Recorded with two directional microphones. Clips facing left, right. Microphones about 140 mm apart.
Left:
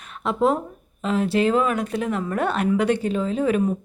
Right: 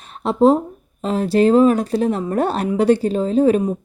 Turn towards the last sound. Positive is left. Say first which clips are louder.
# right 6 dB
turn(degrees=-35)  # may be behind; listen again after turning